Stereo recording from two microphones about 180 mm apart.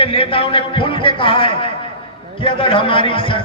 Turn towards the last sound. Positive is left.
turn(degrees=30)  # may be behind; listen again after turning